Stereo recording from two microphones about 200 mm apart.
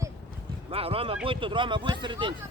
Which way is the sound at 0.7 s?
30° right (ahead or behind).